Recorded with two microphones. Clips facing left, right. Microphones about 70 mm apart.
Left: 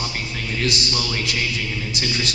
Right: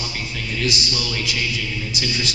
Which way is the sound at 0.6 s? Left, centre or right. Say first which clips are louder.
Even; left.